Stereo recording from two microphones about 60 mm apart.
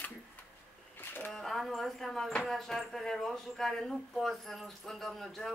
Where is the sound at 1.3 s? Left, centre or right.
Centre.